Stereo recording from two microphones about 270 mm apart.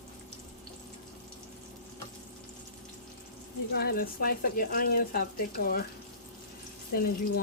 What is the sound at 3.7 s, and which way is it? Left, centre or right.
Speech, left.